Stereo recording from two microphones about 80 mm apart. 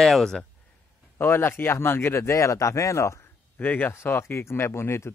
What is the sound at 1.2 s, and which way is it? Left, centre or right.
Speech, left.